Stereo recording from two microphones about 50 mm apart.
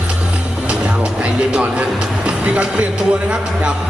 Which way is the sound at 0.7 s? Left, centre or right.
Right.